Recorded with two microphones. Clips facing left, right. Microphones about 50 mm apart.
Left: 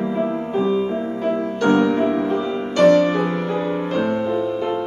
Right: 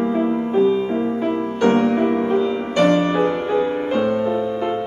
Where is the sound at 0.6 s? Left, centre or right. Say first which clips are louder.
Right 3 dB; centre.